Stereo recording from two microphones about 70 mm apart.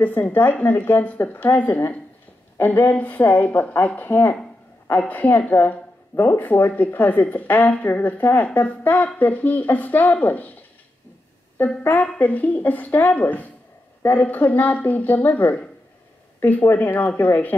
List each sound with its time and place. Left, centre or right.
0.0 s speech: left
11.5 s a woman's voice: left